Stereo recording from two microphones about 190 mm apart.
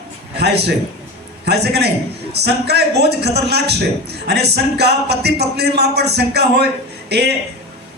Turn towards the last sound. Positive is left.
turn(degrees=-60)  # may be behind; listen again after turning